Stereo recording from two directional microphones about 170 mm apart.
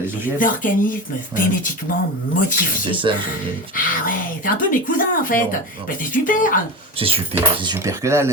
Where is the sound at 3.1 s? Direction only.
30° right (ahead or behind).